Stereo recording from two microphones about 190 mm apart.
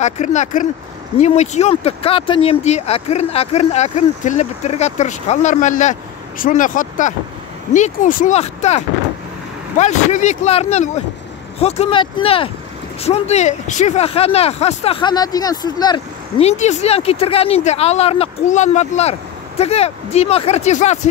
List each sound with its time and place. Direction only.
0.0 s speech: 40° left (ahead or behind); by 16.4 s 20° left (ahead or behind)
16.4 s speech: 35° left (ahead or behind)